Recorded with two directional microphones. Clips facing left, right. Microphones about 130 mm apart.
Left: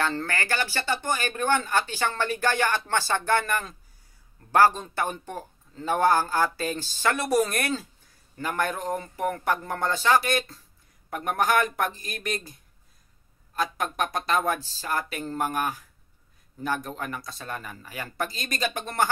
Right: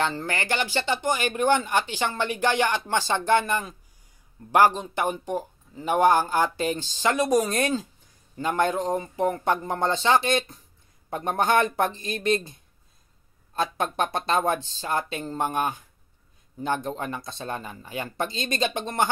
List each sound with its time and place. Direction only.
0.0 s speech: 15° right (ahead or behind)
13.5 s speech: 30° right (ahead or behind)